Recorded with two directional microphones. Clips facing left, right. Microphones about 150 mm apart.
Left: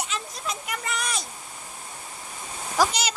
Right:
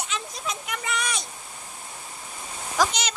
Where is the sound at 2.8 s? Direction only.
5° left (ahead or behind).